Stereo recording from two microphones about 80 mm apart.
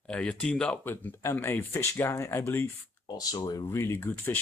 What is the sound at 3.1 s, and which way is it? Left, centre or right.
Speech, left.